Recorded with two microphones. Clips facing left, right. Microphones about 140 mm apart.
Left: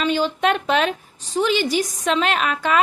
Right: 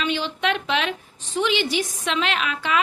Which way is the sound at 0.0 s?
40° left (ahead or behind).